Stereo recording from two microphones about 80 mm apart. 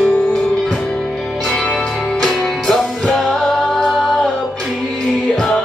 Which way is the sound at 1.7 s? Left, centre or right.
Centre.